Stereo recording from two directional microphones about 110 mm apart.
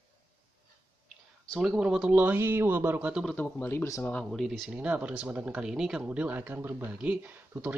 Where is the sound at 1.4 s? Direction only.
Centre (ahead or behind).